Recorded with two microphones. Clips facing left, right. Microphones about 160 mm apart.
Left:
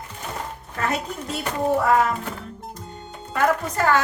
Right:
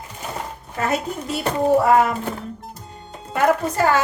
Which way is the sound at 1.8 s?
25° right (ahead or behind).